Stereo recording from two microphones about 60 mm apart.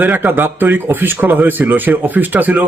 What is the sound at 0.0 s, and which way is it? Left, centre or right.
Speech, right.